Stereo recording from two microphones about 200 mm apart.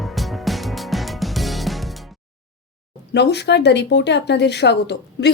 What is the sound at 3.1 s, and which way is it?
Speech, 55° left (ahead or behind).